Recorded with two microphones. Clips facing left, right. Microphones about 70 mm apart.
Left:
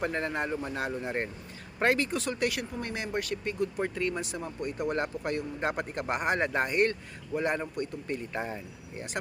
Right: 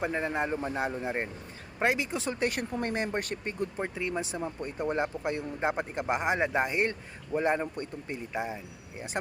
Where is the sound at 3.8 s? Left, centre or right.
Centre.